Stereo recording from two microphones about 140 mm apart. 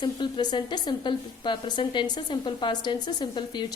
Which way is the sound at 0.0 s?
35° left (ahead or behind).